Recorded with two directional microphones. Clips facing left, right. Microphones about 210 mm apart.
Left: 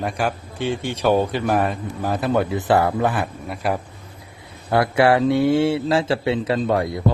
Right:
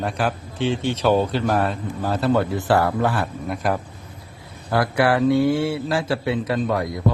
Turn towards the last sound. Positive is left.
turn(degrees=25)  # may be behind; listen again after turning